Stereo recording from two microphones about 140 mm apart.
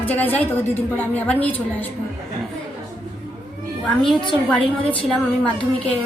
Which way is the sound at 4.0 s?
Centre (ahead or behind).